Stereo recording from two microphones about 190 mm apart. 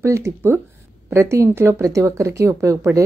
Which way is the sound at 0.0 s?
15° right (ahead or behind).